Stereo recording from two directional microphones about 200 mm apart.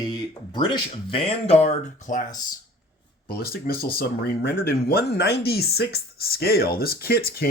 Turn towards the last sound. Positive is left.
turn(degrees=50)  # may be behind; listen again after turning